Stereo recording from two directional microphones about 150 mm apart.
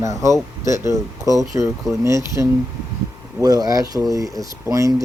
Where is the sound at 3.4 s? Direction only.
25° right (ahead or behind).